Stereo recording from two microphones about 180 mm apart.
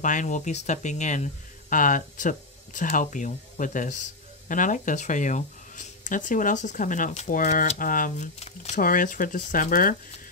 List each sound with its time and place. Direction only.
0.0 s speech: 45° left (ahead or behind)